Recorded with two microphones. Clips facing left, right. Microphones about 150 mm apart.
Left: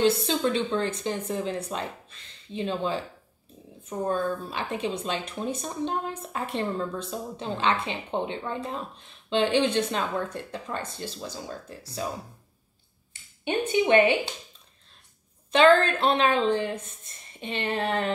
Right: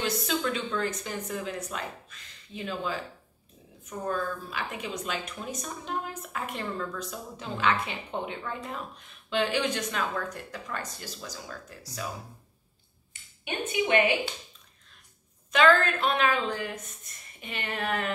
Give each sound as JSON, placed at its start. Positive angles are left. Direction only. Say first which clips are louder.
{"t": 0.0, "sound": "a woman's voice", "louder": "left 6 dB", "side_deg": 30}
{"t": 13.4, "sound": "a woman's voice", "louder": "left 6 dB", "side_deg": 30}
{"t": 15.5, "sound": "a woman's voice", "louder": "left 4 dB", "side_deg": 30}